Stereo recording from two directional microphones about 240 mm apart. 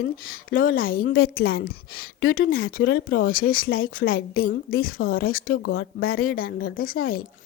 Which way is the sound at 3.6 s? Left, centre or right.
Left.